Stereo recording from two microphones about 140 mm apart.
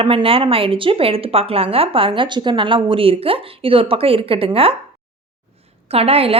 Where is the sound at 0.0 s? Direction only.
40° right (ahead or behind).